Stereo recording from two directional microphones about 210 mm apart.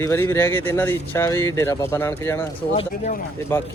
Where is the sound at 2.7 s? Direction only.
35° left (ahead or behind).